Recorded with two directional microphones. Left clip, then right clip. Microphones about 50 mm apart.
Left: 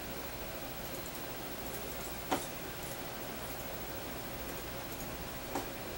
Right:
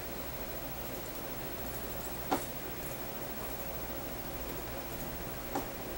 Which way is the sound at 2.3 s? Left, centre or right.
Left.